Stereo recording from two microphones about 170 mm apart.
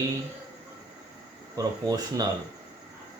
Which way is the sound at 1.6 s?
20° right (ahead or behind).